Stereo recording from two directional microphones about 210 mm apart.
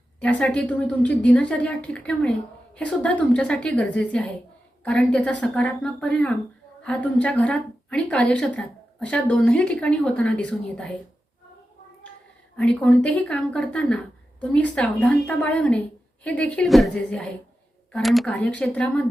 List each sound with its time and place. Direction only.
0.2 s a woman's voice: 5° left (ahead or behind)
12.5 s a woman's voice: 5° left (ahead or behind)